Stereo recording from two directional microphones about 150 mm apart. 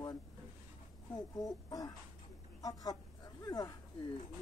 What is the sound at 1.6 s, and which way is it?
Speech, 25° left (ahead or behind).